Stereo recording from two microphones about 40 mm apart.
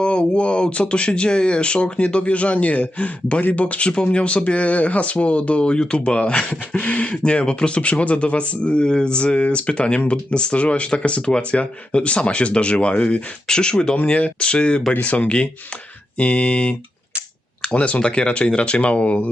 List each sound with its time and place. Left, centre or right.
0.0 s speech: left
7.2 s speech: left
13.5 s speech: left
14.1 s speech: left